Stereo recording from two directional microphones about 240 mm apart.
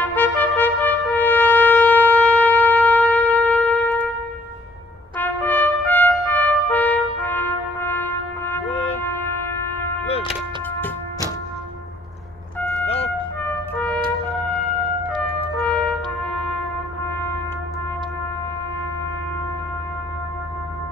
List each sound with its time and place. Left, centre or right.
0.0 s trumpet: centre
5.1 s trumpet: centre
10.0 s vehicle: left
12.5 s vehicle: centre
12.8 s music: left
13.4 s music: centre
15.5 s trumpet: centre